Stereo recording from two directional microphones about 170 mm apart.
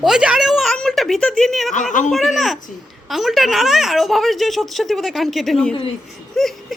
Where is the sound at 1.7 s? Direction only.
50° left (ahead or behind).